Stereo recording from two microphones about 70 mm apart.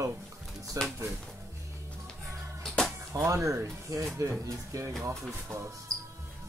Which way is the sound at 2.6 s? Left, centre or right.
Centre.